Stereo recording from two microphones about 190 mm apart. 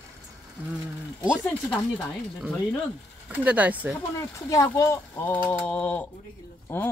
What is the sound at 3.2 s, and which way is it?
Speech, 10° right (ahead or behind).